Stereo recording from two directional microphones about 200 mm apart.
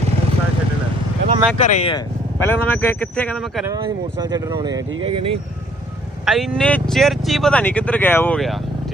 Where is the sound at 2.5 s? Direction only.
10° left (ahead or behind).